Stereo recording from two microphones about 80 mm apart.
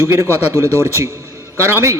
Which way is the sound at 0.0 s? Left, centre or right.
Right.